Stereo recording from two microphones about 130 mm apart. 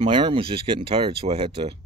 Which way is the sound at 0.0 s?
40° right (ahead or behind).